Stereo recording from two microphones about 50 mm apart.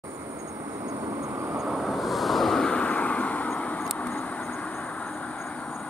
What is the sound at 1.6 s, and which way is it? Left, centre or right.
Vehicle, centre.